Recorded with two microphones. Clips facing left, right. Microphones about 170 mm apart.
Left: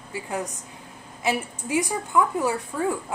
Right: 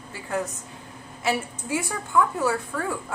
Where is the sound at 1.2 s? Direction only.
15° left (ahead or behind).